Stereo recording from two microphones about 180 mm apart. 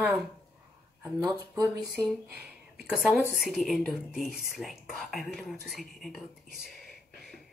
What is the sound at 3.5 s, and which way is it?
Speech, centre (ahead or behind).